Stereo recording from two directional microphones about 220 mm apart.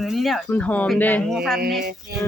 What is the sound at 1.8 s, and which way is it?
Speech, 45° right (ahead or behind).